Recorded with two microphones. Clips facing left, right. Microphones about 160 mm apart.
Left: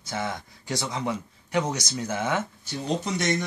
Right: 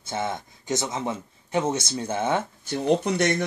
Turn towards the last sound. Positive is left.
turn(degrees=-60)  # may be behind; listen again after turning